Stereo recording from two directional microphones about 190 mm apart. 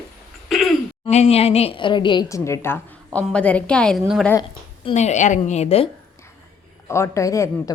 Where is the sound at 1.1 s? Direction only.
35° left (ahead or behind); by 4.3 s centre (ahead or behind).